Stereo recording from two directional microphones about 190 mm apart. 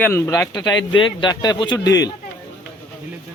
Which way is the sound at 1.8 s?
70° left (ahead or behind).